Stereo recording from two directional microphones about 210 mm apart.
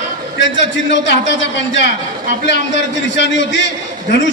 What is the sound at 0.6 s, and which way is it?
A man's voice, 60° left (ahead or behind).